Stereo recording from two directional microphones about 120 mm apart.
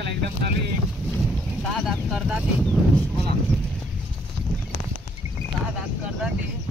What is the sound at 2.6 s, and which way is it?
Speech, 10° left (ahead or behind).